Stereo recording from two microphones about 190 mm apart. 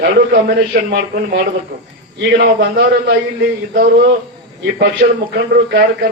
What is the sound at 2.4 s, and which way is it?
Speech, 55° right (ahead or behind).